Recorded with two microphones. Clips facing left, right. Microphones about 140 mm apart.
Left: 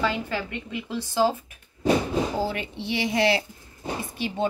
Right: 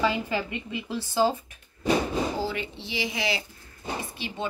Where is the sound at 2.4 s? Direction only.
50° left (ahead or behind).